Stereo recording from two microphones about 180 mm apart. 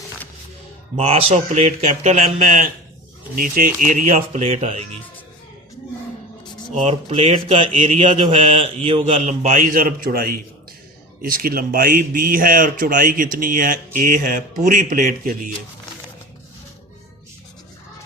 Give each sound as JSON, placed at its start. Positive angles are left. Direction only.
{"t": 0.9, "sound": "speech", "side_deg": -35}
{"t": 3.3, "sound": "speech", "side_deg": -50}
{"t": 6.7, "sound": "speech", "side_deg": -35}